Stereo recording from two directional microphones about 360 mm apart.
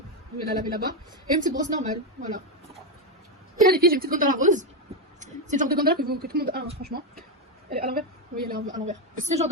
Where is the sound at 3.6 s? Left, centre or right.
Right.